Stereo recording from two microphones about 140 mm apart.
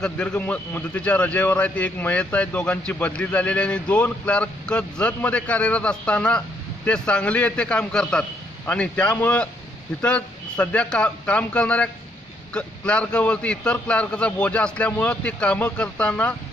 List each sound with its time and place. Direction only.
0.0 s a man's voice: 5° left (ahead or behind)